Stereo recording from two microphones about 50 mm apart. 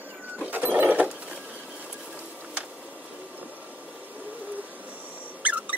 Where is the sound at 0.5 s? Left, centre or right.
Right.